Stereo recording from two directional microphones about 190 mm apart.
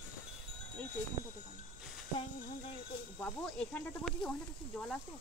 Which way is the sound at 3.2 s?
5° left (ahead or behind).